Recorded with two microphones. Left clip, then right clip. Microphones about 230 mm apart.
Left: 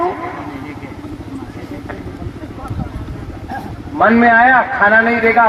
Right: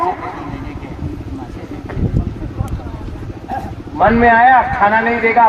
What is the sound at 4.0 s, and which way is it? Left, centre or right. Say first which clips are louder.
A man's voice: even; left.